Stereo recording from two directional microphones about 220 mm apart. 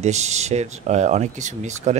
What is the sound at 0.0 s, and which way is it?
Speech, 30° right (ahead or behind).